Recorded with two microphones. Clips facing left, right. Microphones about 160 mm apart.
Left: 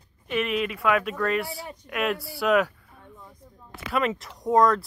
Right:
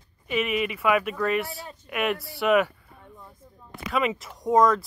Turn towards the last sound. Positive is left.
turn(degrees=0)  # may be behind; listen again after turning